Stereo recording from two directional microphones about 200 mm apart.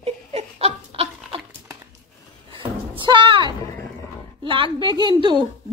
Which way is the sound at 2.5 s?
25° right (ahead or behind).